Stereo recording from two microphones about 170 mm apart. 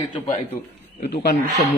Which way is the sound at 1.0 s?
90° left.